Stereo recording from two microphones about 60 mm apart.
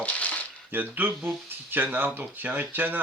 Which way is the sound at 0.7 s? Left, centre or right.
Right.